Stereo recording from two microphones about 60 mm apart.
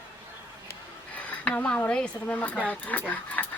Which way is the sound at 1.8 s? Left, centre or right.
Centre.